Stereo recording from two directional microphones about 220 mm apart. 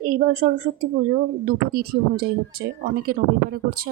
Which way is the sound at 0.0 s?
40° right (ahead or behind).